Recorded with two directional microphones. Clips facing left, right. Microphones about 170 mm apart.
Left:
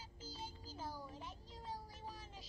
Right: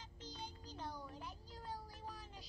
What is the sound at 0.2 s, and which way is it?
Music, 5° left (ahead or behind).